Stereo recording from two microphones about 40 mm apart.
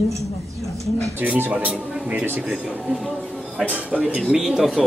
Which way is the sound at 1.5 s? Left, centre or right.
Right.